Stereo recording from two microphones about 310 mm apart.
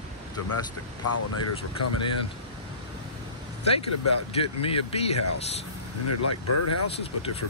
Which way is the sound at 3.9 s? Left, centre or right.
Left.